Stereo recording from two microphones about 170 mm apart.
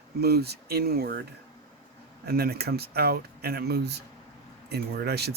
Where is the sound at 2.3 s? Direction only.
65° right (ahead or behind).